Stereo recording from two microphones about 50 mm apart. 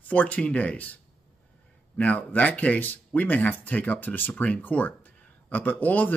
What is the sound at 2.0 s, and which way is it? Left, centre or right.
A man's voice, left.